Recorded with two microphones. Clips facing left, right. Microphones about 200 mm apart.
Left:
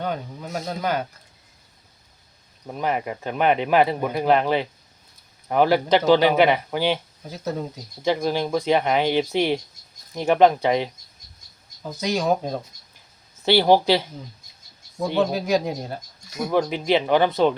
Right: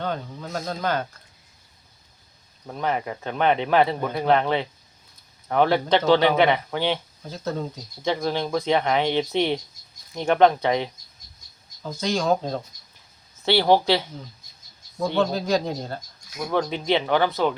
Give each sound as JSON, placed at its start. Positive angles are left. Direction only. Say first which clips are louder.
{"t": 0.0, "sound": "speech", "louder": "left 1 dB", "side_deg": 10}
{"t": 2.6, "sound": "speech", "louder": "left 1 dB", "side_deg": 15}